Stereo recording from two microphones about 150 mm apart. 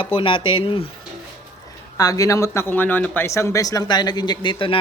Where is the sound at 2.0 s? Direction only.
25° left (ahead or behind).